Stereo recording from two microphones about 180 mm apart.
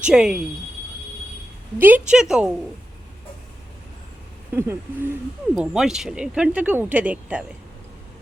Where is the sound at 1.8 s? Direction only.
5° right (ahead or behind).